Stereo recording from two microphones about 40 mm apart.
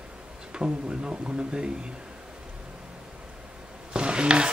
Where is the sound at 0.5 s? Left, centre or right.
Right.